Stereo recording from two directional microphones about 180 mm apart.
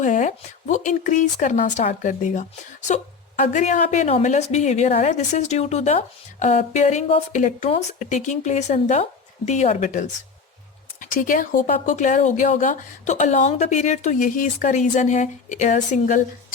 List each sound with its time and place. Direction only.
0.0 s speech: 45° left (ahead or behind)
11.0 s speech: 50° left (ahead or behind)